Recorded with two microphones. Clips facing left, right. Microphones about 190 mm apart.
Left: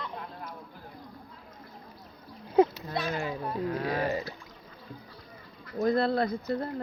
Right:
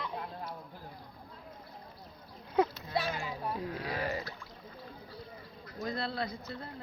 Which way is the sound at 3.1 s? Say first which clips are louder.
Left 5 dB; 60° left (ahead or behind).